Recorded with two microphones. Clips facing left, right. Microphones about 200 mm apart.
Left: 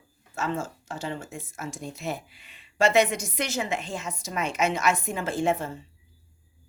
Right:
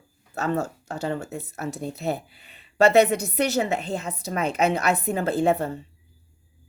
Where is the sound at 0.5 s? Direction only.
65° right (ahead or behind).